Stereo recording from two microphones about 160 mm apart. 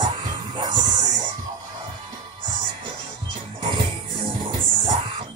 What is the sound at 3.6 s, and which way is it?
Music, 30° right (ahead or behind).